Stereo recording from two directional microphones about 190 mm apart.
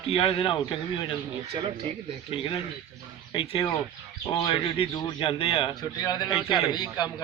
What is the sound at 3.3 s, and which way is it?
A man's voice, 30° left (ahead or behind).